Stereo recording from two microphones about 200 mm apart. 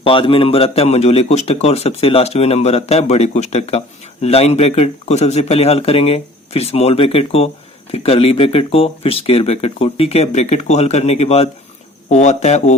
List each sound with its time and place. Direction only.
0.0 s speech: 25° left (ahead or behind)